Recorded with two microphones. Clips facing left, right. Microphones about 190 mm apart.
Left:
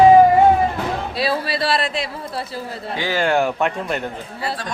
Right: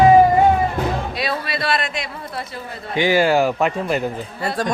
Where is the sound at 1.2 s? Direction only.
30° left (ahead or behind).